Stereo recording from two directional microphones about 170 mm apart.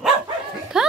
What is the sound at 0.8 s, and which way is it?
Music, centre (ahead or behind).